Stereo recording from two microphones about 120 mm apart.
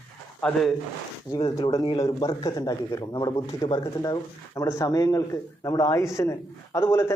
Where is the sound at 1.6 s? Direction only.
30° left (ahead or behind).